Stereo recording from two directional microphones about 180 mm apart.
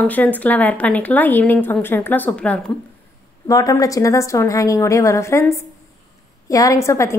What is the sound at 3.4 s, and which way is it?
A woman's voice, 20° left (ahead or behind).